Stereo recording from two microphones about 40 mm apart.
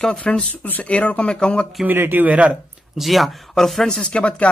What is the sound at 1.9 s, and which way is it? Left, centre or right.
Speech, right.